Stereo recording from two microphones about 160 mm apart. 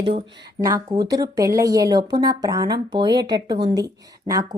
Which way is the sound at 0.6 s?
20° right (ahead or behind).